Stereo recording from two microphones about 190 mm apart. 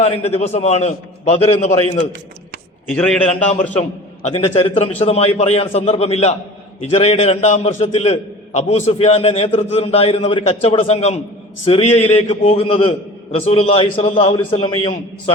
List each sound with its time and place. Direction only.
0.3 s a man's voice: 35° left (ahead or behind)
2.9 s a man's voice: 5° left (ahead or behind)
3.8 s a man's voice: 35° left (ahead or behind)